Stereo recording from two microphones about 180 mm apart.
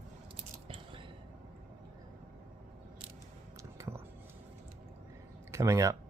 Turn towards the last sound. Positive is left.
turn(degrees=-15)  # may be behind; listen again after turning